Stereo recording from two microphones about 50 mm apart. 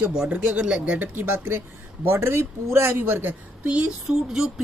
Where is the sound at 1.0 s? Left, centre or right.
Right.